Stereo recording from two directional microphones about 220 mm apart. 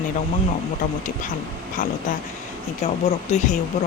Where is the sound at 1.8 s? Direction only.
40° left (ahead or behind).